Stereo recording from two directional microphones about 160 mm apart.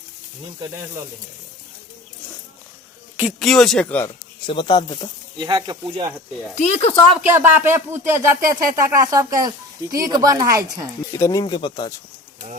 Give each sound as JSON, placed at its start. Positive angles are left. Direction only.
{"t": 3.4, "sound": "speech", "side_deg": 0}
{"t": 3.8, "sound": "speech", "side_deg": 10}
{"t": 4.4, "sound": "speech", "side_deg": 30}
{"t": 5.4, "sound": "speech", "side_deg": -25}
{"t": 6.6, "sound": "speech", "side_deg": 45}
{"t": 7.2, "sound": "speech", "side_deg": -10}
{"t": 11.1, "sound": "speech", "side_deg": 20}